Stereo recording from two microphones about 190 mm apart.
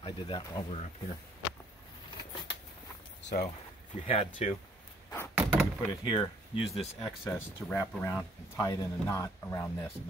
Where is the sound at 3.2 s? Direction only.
65° left (ahead or behind).